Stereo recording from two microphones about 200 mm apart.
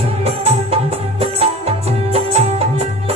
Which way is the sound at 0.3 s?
30° right (ahead or behind).